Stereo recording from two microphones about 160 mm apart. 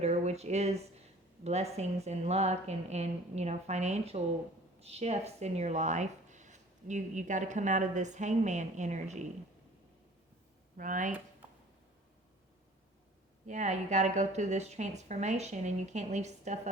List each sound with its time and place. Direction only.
0.0 s a sound: 45° right (ahead or behind)
1.5 s speech: 40° right (ahead or behind)
10.8 s speech: 55° right (ahead or behind)
13.5 s speech: 45° right (ahead or behind)